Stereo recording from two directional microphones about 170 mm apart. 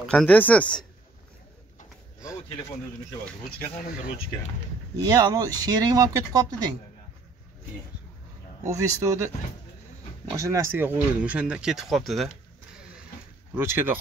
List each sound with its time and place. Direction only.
0.0 s speech: 5° left (ahead or behind)
3.5 s speech: 60° left (ahead or behind)
5.0 s speech: 20° right (ahead or behind)
8.6 s speech: 20° right (ahead or behind)
10.3 s speech: 20° right (ahead or behind); by 12.3 s centre (ahead or behind)
13.6 s speech: 15° right (ahead or behind)